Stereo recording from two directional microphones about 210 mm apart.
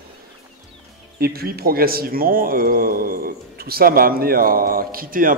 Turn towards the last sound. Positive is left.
turn(degrees=-40)  # may be behind; listen again after turning